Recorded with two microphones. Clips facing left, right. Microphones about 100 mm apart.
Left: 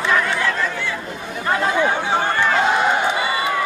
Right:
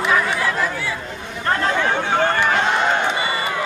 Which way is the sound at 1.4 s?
10° left (ahead or behind).